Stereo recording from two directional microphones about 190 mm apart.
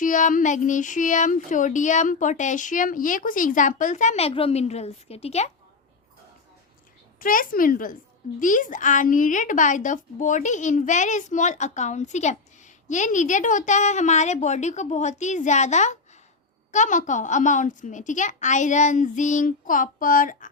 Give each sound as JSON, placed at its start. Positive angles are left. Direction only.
{"t": 0.0, "sound": "speech", "side_deg": 45}
{"t": 7.2, "sound": "a woman's voice", "side_deg": 50}